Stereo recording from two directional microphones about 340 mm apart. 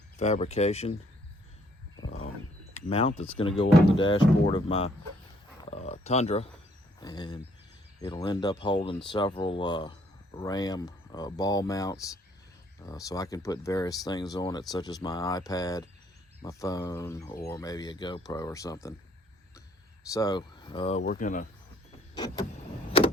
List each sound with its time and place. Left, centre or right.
0.2 s speech: centre
2.0 s wild animals: left
2.7 s speech: centre
20.1 s speech: centre
22.1 s vehicle: centre